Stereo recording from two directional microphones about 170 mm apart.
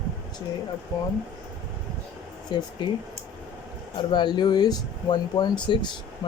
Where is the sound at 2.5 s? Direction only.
25° left (ahead or behind).